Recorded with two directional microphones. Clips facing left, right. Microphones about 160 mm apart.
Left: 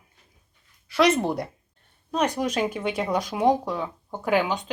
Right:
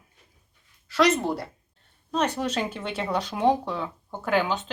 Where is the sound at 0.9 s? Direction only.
10° left (ahead or behind).